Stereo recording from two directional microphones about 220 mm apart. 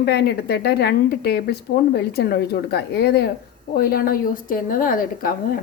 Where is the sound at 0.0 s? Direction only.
45° left (ahead or behind).